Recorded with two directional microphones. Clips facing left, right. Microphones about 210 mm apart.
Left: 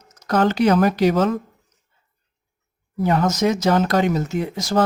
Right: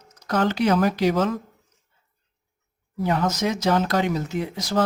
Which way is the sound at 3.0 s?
55° left (ahead or behind).